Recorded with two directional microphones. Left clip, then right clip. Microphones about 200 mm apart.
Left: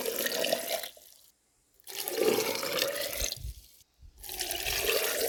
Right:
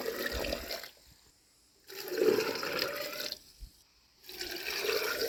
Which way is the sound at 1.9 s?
35° left (ahead or behind).